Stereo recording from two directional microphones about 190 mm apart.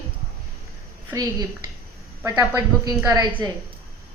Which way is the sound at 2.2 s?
15° right (ahead or behind).